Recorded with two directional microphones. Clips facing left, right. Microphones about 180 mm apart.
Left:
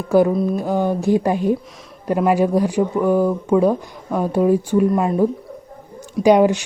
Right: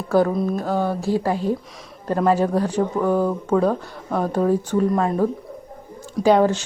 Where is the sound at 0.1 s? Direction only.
10° left (ahead or behind).